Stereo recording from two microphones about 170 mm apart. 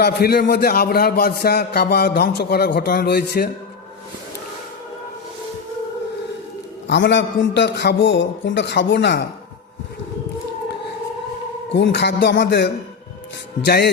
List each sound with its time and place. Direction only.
0.0 s a man's voice: 70° left (ahead or behind)
6.8 s a man's voice: 90° left
11.7 s a man's voice: 90° left; by 13.9 s 75° left (ahead or behind)